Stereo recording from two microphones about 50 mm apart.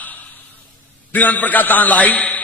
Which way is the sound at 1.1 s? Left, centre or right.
Left.